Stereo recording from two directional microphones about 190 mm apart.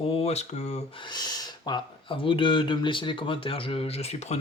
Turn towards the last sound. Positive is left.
turn(degrees=35)  # may be behind; listen again after turning